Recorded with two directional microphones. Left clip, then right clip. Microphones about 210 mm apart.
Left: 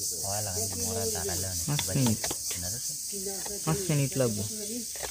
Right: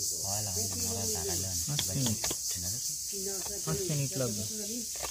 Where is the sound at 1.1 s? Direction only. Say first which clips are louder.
Left 1 dB; 50° left (ahead or behind).